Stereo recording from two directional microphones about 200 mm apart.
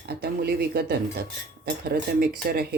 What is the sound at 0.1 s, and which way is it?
Speech, 50° right (ahead or behind).